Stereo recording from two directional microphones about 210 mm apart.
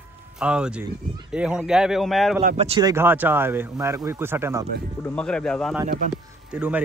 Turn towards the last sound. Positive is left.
turn(degrees=-5)  # may be behind; listen again after turning